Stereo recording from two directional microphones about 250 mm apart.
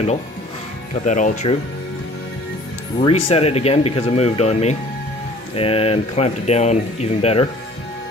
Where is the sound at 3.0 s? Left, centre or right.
Left.